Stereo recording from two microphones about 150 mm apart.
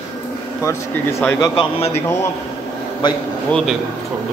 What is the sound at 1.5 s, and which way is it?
Speech, 35° left (ahead or behind).